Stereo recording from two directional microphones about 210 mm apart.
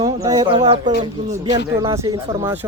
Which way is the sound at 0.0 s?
20° right (ahead or behind).